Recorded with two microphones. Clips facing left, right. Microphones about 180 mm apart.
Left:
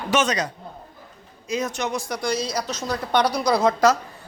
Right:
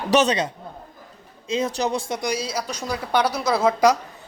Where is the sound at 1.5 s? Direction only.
30° right (ahead or behind).